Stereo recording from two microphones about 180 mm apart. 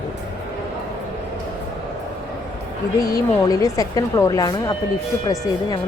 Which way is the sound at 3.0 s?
20° left (ahead or behind).